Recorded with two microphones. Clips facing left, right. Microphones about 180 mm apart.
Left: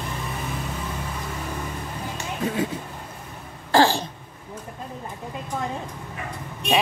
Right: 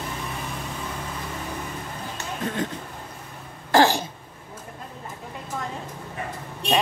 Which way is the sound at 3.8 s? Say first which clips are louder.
Even; 15° right (ahead or behind).